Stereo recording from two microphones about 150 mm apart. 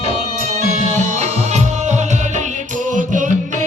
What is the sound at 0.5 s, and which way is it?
Music, 50° right (ahead or behind).